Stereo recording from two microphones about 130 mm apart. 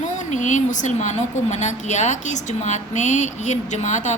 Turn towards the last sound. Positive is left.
turn(degrees=65)  # may be behind; listen again after turning